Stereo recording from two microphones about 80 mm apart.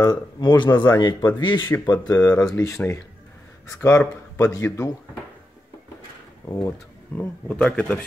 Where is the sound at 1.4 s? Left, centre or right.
Left.